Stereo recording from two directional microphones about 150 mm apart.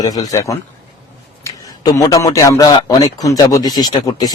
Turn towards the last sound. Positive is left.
turn(degrees=25)  # may be behind; listen again after turning